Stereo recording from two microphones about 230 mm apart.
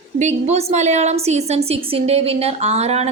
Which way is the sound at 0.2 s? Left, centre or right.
Right.